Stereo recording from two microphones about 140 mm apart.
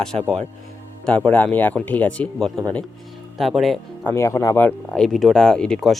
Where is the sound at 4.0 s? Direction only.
20° left (ahead or behind).